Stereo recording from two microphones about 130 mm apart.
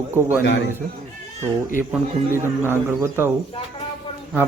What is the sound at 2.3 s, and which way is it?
Speech, 20° right (ahead or behind).